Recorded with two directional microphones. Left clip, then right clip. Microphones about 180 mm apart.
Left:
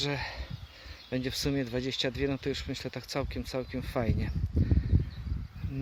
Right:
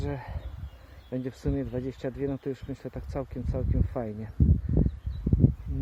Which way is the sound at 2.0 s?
15° left (ahead or behind).